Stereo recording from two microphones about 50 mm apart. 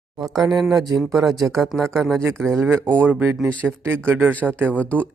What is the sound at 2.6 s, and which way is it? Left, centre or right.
Speech, right.